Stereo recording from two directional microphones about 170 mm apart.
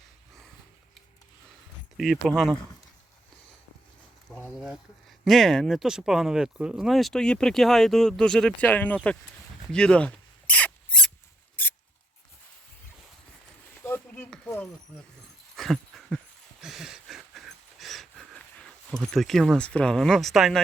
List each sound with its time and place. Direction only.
2.0 s speech: centre (ahead or behind)
4.5 s a sound: 5° right (ahead or behind)
5.2 s speech: centre (ahead or behind)
9.7 s rodents: 5° left (ahead or behind)
11.6 s mouse: 10° left (ahead or behind)
13.8 s a sound: 15° left (ahead or behind)